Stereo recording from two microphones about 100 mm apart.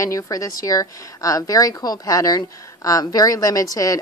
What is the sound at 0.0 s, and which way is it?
A woman's voice, 35° left (ahead or behind).